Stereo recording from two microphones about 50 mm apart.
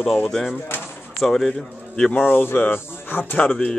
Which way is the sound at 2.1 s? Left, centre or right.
Left.